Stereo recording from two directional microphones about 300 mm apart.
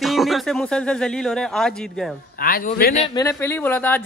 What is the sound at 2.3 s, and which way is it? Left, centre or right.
Speech, left.